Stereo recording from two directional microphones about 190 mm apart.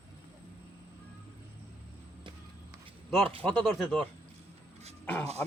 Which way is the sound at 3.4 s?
5° left (ahead or behind).